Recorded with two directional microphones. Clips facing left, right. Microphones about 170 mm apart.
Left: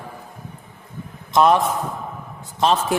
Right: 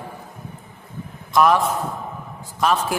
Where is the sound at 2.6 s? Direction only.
25° left (ahead or behind).